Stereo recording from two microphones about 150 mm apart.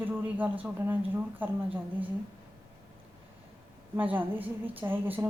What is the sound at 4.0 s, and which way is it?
Speech, 10° right (ahead or behind).